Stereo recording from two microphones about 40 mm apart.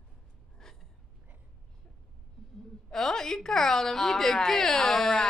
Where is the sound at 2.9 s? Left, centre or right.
Centre.